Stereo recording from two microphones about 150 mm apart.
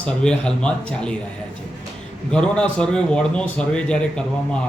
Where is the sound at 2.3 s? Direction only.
5° left (ahead or behind).